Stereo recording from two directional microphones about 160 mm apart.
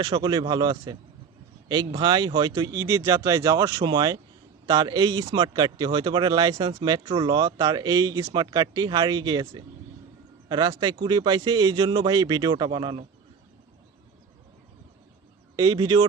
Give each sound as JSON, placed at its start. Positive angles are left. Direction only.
{"t": 0.0, "sound": "speech", "side_deg": -25}
{"t": 15.5, "sound": "speech", "side_deg": -25}